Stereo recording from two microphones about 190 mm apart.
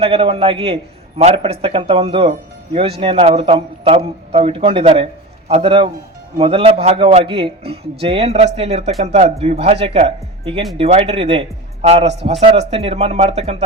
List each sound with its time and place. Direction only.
0.0 s a man's voice: 30° right (ahead or behind)